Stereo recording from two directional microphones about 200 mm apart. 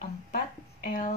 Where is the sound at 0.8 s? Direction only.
40° left (ahead or behind).